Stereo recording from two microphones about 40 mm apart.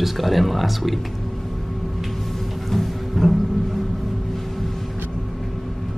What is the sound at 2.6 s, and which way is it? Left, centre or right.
Music, centre.